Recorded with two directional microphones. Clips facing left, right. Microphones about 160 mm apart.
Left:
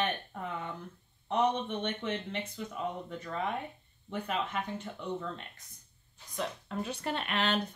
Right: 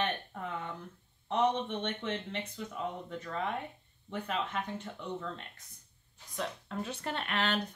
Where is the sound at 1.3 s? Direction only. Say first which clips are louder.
Even; 10° left (ahead or behind).